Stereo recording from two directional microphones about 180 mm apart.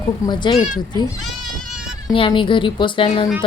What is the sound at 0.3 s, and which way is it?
A woman's voice, 25° left (ahead or behind).